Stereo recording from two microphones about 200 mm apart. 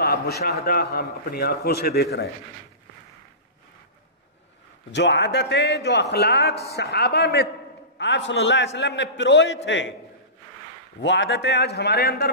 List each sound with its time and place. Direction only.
0.0 s a man's voice: 50° left (ahead or behind)
4.9 s a man's voice: 60° left (ahead or behind)
11.0 s a man's voice: 65° left (ahead or behind)